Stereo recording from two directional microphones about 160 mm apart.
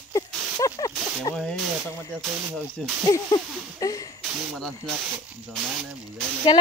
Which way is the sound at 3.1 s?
25° left (ahead or behind).